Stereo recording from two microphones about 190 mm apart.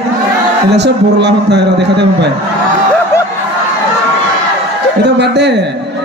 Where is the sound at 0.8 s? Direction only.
65° right (ahead or behind).